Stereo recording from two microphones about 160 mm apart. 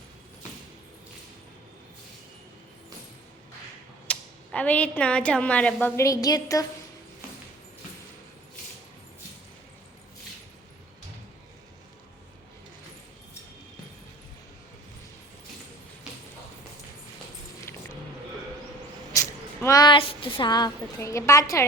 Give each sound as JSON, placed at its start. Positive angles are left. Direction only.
{"t": 4.1, "sound": "speech", "side_deg": 10}
{"t": 6.0, "sound": "a woman's voice", "side_deg": 20}
{"t": 19.6, "sound": "a woman's voice", "side_deg": 25}